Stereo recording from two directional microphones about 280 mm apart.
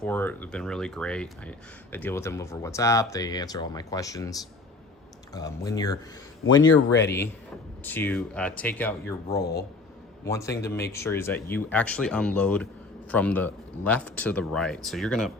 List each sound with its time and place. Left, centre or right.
0.0 s speech: centre
6.6 s speech: left
7.9 s speech: centre
9.4 s speech: left
10.2 s speech: centre